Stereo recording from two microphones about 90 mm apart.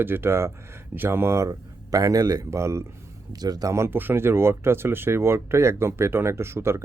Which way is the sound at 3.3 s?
45° right (ahead or behind).